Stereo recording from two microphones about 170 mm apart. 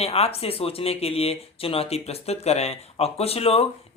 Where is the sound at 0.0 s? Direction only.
35° left (ahead or behind).